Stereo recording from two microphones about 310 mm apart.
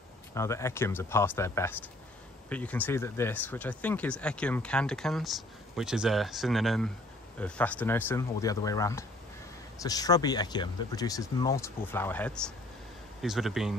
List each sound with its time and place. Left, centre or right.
0.3 s speech: centre